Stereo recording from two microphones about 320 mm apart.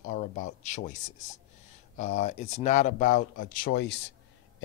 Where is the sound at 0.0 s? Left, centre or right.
Left.